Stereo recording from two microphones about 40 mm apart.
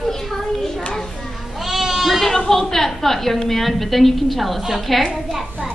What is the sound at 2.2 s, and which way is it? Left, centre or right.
A woman's voice, centre.